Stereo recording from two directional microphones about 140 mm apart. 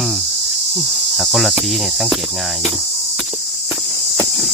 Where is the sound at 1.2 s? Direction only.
Centre (ahead or behind).